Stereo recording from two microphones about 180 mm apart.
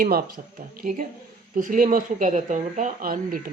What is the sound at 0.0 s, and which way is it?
Speech, 55° right (ahead or behind).